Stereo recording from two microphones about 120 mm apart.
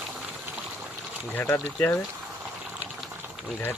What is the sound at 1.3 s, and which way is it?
Speech, 15° left (ahead or behind).